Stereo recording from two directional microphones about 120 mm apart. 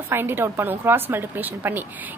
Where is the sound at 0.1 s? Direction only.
20° right (ahead or behind).